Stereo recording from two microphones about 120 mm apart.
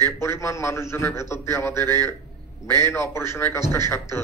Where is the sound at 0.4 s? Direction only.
25° left (ahead or behind).